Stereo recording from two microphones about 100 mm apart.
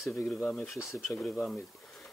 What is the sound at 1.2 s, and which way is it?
Speech, 10° left (ahead or behind).